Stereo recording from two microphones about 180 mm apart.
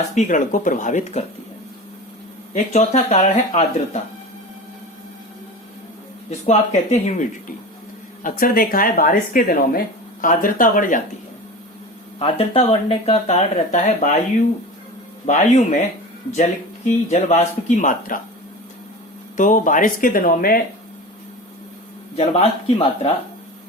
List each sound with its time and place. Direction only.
0.1 s speech: 45° left (ahead or behind)
2.7 s speech: 40° left (ahead or behind)
6.4 s speech: 40° left (ahead or behind)
12.2 s speech: 35° left (ahead or behind)
15.3 s speech: 45° left (ahead or behind)
17.1 s speech: 40° left (ahead or behind)
19.4 s speech: 45° left (ahead or behind)
22.1 s speech: 35° left (ahead or behind)